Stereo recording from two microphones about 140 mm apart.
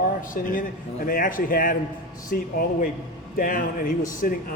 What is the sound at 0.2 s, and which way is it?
Speech, 80° left.